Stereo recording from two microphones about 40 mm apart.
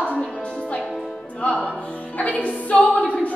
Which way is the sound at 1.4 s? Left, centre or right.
Left.